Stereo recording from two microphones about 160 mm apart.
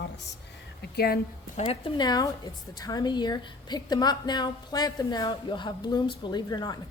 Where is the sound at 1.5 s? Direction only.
35° left (ahead or behind).